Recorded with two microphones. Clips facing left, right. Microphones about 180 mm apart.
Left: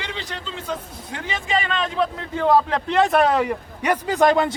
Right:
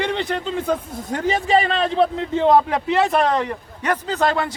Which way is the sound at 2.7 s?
5° right (ahead or behind).